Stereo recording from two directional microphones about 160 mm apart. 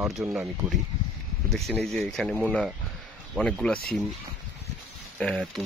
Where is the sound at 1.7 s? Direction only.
Centre (ahead or behind).